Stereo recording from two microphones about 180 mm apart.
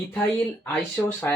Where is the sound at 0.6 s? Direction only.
10° left (ahead or behind).